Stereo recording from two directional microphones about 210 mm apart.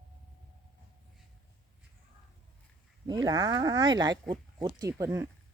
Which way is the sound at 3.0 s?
20° right (ahead or behind).